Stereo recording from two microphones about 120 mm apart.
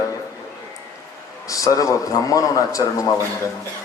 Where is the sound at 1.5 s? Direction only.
30° left (ahead or behind).